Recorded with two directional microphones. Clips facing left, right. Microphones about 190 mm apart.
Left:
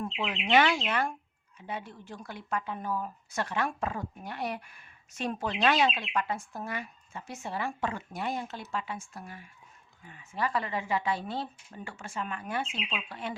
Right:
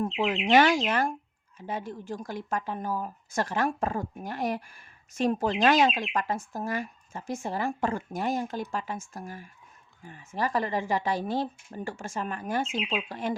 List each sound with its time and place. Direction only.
0.0 s speech: 40° right (ahead or behind)